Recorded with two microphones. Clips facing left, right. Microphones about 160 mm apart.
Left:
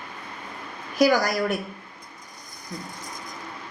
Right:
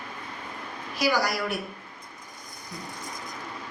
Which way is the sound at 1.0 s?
45° left (ahead or behind).